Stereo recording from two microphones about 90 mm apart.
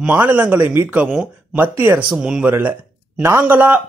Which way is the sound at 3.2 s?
25° right (ahead or behind).